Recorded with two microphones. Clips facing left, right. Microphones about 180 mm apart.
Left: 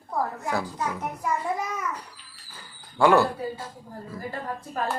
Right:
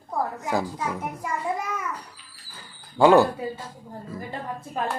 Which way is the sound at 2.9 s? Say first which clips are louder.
Right 3 dB; 20° right (ahead or behind).